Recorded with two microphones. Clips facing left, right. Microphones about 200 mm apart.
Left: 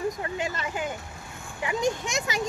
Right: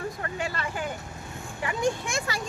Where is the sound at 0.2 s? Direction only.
20° left (ahead or behind).